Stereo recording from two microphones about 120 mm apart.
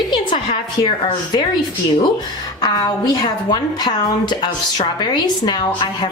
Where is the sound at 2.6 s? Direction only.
35° left (ahead or behind).